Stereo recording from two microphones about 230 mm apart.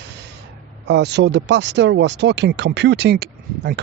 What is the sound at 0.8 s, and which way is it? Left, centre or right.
Speech, right.